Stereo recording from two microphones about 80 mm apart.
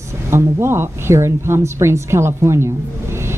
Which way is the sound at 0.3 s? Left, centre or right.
Right.